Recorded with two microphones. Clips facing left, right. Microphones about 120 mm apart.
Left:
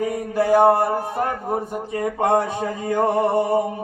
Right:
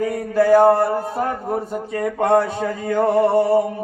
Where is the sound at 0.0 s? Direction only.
20° left (ahead or behind).